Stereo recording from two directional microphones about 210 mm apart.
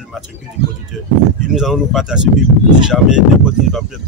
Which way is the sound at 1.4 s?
5° right (ahead or behind).